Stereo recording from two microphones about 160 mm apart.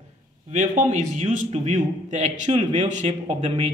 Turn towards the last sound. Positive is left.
turn(degrees=-40)  # may be behind; listen again after turning